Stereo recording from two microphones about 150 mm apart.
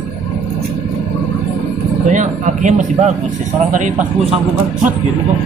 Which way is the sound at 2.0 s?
60° right (ahead or behind).